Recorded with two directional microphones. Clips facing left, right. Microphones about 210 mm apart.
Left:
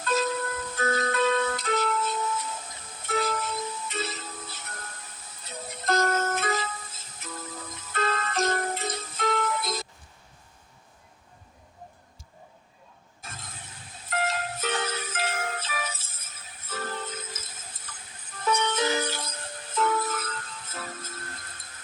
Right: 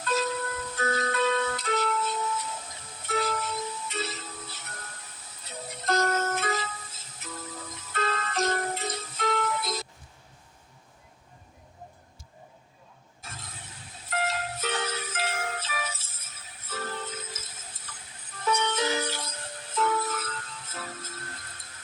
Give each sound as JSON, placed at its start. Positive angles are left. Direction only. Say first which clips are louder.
{"t": 0.0, "sound": "music", "louder": "left 2 dB", "side_deg": 50}
{"t": 13.2, "sound": "mechanisms", "louder": "left 1 dB", "side_deg": 50}
{"t": 14.1, "sound": "music", "louder": "left 1 dB", "side_deg": 50}